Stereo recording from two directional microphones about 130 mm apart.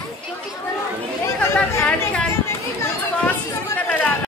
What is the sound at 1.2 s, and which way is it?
Chatter, 20° left (ahead or behind).